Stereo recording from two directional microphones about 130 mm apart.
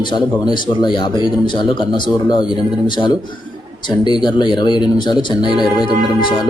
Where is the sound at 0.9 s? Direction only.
40° left (ahead or behind).